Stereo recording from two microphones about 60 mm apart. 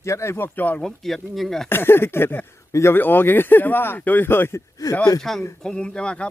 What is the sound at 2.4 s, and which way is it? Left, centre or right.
Speech, left.